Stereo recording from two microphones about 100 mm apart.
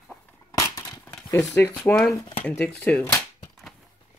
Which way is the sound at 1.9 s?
30° left (ahead or behind).